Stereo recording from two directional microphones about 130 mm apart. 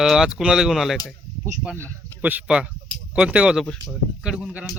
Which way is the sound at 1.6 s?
15° right (ahead or behind).